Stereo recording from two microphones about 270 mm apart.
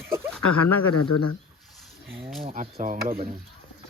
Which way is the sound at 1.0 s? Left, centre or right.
Left.